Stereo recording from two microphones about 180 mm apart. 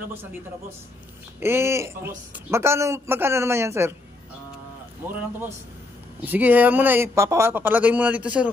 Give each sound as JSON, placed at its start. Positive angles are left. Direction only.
{"t": 1.4, "sound": "a man's voice", "side_deg": -15}
{"t": 6.2, "sound": "a man's voice", "side_deg": -10}